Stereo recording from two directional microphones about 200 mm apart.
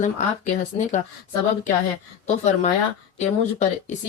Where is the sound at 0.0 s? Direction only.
40° left (ahead or behind).